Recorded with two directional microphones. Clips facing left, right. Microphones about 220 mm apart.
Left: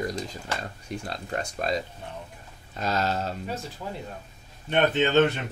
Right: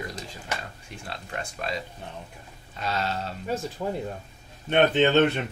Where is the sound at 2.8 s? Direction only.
40° left (ahead or behind).